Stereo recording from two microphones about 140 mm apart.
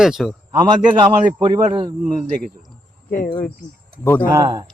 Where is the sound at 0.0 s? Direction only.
Centre (ahead or behind).